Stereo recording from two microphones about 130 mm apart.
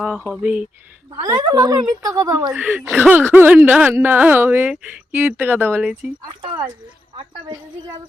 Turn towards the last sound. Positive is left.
turn(degrees=-35)  # may be behind; listen again after turning